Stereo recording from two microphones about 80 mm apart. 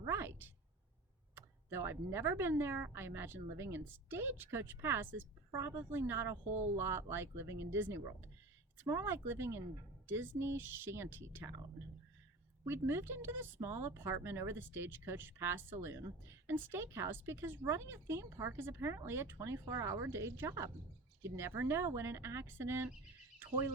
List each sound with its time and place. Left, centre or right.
0.0 s a sound: right
1.4 s speech: right
12.6 s speech: right